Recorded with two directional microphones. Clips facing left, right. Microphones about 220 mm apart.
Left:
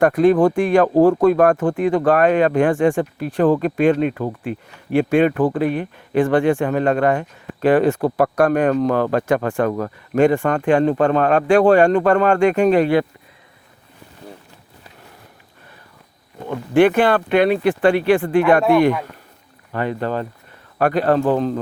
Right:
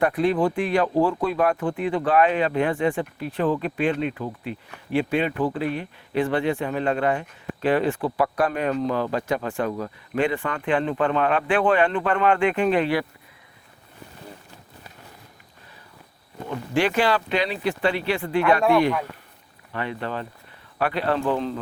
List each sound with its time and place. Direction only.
0.0 s speech: 45° left (ahead or behind)
16.7 s speech: 55° left (ahead or behind)
19.7 s speech: 40° left (ahead or behind)